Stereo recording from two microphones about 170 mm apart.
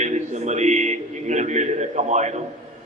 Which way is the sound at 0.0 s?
45° right (ahead or behind).